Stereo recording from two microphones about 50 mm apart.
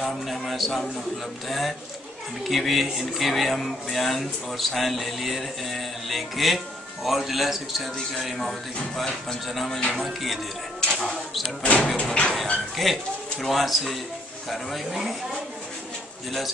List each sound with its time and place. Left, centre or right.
0.0 s speech: centre
9.5 s speech: centre
9.8 s speech: left
10.0 s speech: centre
10.8 s a sound: centre
11.6 s speech: left
12.0 s a sound: left
12.7 s speech: centre